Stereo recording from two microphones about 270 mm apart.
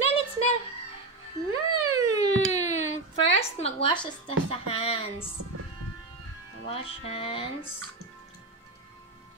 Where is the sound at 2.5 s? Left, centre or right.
Left.